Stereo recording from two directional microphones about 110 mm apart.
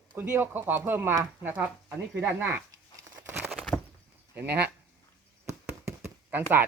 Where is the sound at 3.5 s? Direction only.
10° left (ahead or behind).